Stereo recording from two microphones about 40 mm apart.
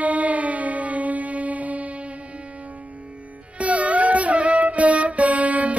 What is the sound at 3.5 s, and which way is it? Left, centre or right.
Music, right.